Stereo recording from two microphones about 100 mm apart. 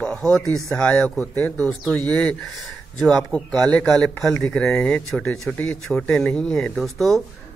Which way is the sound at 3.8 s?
5° left (ahead or behind).